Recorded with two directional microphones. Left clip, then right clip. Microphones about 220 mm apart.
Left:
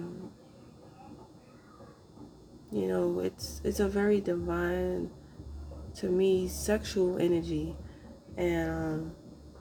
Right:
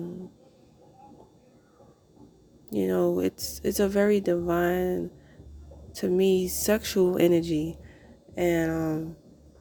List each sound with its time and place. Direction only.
2.7 s speech: 40° right (ahead or behind)